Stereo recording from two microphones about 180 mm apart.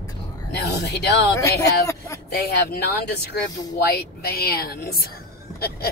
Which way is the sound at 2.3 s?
60° left (ahead or behind).